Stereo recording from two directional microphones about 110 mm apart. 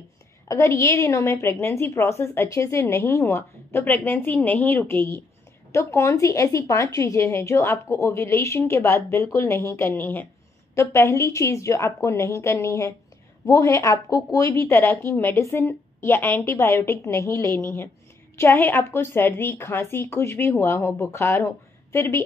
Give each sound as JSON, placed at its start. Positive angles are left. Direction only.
{"t": 0.5, "sound": "a woman's voice", "side_deg": 25}